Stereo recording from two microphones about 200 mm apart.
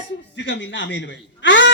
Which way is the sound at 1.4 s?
70° left (ahead or behind).